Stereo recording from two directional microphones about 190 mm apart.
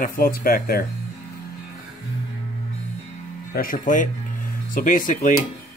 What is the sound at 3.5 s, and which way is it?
Speech, 45° left (ahead or behind).